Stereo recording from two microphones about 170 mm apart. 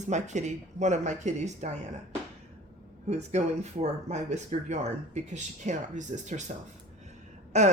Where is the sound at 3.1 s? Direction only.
40° right (ahead or behind).